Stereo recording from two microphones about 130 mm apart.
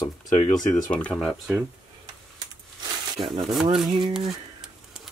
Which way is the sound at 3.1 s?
40° right (ahead or behind).